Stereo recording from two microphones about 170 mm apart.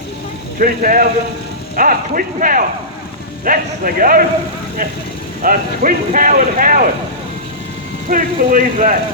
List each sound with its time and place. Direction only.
0.6 s speech: 55° right (ahead or behind)
5.4 s speech: 55° right (ahead or behind)
8.1 s speech: 50° right (ahead or behind)